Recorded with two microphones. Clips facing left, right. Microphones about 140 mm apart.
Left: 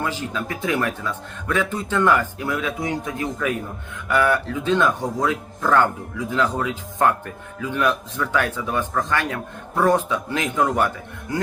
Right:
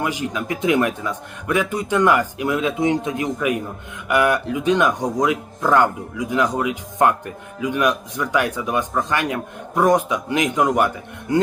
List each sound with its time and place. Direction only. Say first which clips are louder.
0.0 s a man's voice: right 2 dB; 15° right (ahead or behind)